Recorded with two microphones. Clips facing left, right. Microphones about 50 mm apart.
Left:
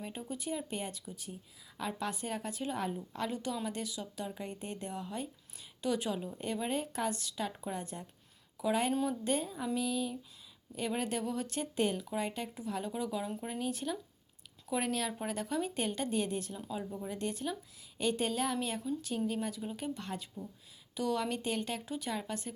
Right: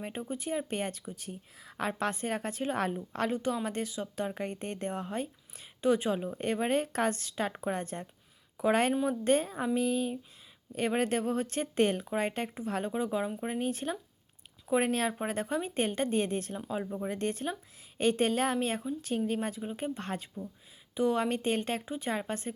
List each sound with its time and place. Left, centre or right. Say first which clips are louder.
0.0 s a woman's voice: right 4 dB; right
20.9 s speech: right 5 dB; right
21.8 s speech: right 4 dB; right